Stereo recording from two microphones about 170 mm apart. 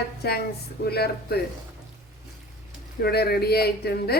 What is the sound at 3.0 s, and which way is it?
Speech, 70° left (ahead or behind).